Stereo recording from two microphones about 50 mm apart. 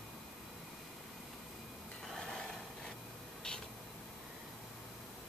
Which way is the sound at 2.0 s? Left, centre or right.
Centre.